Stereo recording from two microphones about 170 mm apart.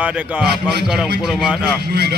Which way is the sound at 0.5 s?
75° right (ahead or behind).